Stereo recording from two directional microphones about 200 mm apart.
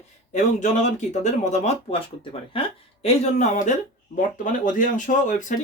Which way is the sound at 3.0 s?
35° left (ahead or behind).